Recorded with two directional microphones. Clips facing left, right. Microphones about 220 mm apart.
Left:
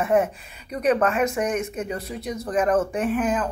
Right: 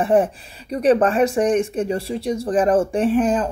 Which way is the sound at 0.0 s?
30° right (ahead or behind).